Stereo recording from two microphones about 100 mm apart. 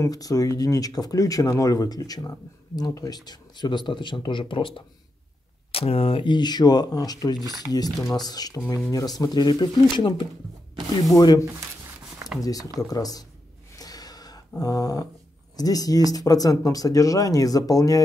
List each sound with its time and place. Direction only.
0.0 s speech: 35° left (ahead or behind); by 4.8 s 60° left (ahead or behind)
5.7 s speech: 75° left (ahead or behind); by 10.2 s 50° left (ahead or behind)
11.1 s speech: 40° left (ahead or behind)
13.7 s gasp: 40° left (ahead or behind)
14.6 s speech: 40° left (ahead or behind)